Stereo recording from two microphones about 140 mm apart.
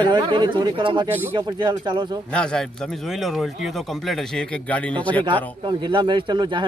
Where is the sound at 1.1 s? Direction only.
15° right (ahead or behind).